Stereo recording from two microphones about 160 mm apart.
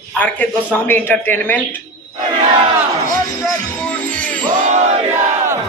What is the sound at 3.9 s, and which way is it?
Music, 10° left (ahead or behind).